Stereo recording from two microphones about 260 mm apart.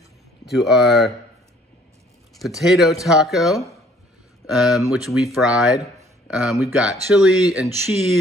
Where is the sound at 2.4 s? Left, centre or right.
Centre.